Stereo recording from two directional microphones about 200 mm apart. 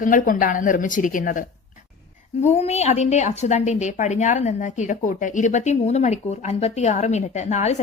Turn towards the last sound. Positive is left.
turn(degrees=35)  # may be behind; listen again after turning